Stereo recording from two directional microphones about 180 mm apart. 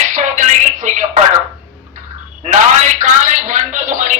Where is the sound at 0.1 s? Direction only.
45° right (ahead or behind).